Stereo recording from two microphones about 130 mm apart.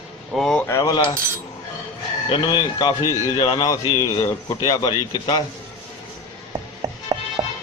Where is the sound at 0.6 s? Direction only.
25° left (ahead or behind).